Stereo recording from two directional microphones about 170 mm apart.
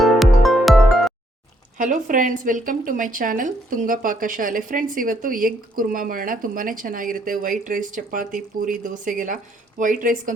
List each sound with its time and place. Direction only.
0.0 s music: centre (ahead or behind)
1.8 s speech: 50° right (ahead or behind)